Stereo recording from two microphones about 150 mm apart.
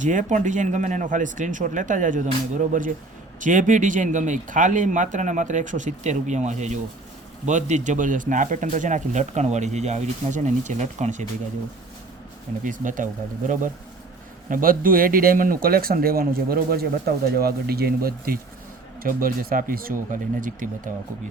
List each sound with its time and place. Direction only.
0.0 s speech: 55° right (ahead or behind)
12.6 s speech: 60° right (ahead or behind)
14.5 s speech: 70° right (ahead or behind); by 18.3 s 85° right
19.0 s speech: 70° right (ahead or behind)